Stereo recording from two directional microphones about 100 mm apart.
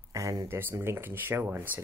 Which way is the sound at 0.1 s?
35° right (ahead or behind).